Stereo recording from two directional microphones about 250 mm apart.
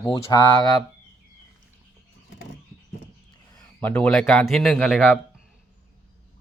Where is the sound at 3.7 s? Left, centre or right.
Centre.